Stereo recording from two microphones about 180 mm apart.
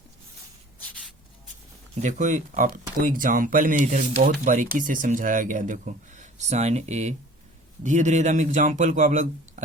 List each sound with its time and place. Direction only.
2.0 s speech: 40° right (ahead or behind)